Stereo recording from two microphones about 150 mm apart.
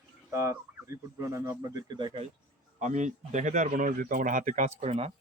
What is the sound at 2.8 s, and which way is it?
Speech, 55° right (ahead or behind).